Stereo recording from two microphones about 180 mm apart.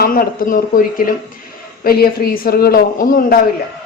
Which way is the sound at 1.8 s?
55° left (ahead or behind).